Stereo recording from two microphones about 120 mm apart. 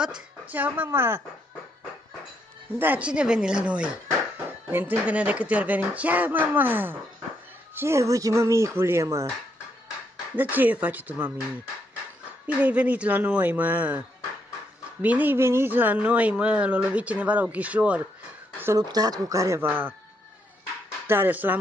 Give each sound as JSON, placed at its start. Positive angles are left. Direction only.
{"t": 0.0, "sound": "speech", "side_deg": -10}
{"t": 2.8, "sound": "speech", "side_deg": -10}
{"t": 10.3, "sound": "speech", "side_deg": -15}
{"t": 12.4, "sound": "speech", "side_deg": -10}
{"t": 18.8, "sound": "speech", "side_deg": -30}
{"t": 21.1, "sound": "speech", "side_deg": -15}